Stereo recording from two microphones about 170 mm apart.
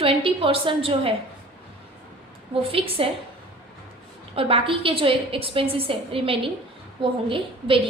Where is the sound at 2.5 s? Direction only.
35° right (ahead or behind).